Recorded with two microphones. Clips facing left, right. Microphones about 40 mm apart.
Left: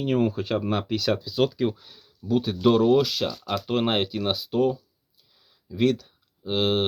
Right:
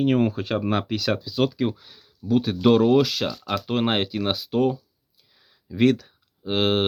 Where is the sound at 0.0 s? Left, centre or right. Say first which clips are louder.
Right 3 dB; right; by 2.3 s centre.